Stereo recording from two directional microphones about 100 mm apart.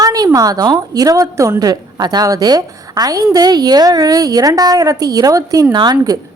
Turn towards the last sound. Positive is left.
turn(degrees=-45)  # may be behind; listen again after turning